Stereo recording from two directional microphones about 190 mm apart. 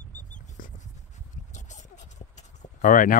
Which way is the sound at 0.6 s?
45° left (ahead or behind).